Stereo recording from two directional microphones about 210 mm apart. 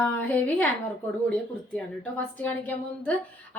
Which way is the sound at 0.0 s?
5° left (ahead or behind).